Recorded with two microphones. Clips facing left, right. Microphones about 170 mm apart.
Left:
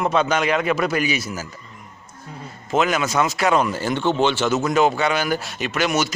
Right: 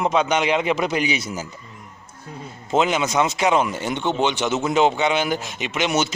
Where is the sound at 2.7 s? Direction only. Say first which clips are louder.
Even; 20° right (ahead or behind).